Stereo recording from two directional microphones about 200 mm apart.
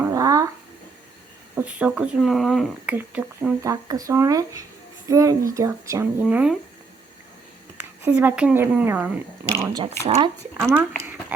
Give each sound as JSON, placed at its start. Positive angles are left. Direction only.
{"t": 0.0, "sound": "a sound", "side_deg": -15}
{"t": 1.5, "sound": "speech", "side_deg": -5}
{"t": 7.8, "sound": "speech", "side_deg": -10}
{"t": 10.7, "sound": "speech", "side_deg": -10}